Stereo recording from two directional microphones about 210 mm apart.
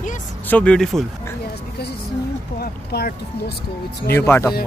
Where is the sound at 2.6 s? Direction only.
50° left (ahead or behind).